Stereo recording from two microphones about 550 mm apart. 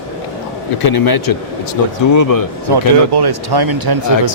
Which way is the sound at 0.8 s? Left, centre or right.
Left.